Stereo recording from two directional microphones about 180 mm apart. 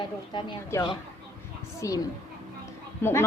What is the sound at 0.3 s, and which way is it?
A woman's voice, 25° left (ahead or behind).